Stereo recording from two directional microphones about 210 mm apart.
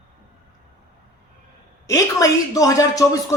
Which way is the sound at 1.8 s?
15° left (ahead or behind).